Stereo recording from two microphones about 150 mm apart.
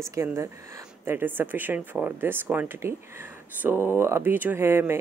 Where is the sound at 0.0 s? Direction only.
20° right (ahead or behind).